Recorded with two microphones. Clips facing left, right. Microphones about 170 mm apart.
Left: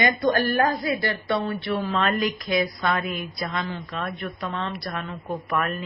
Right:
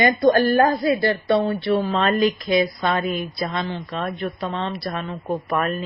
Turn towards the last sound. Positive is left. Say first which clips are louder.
# right 4 dB
turn(degrees=-30)  # may be behind; listen again after turning